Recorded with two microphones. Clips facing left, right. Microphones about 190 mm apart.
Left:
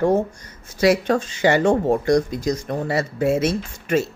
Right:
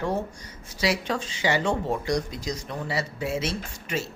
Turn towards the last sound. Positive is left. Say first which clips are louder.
# left 10 dB
turn(degrees=50)  # may be behind; listen again after turning